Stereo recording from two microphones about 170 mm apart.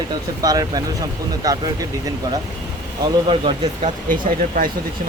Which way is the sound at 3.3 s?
30° right (ahead or behind).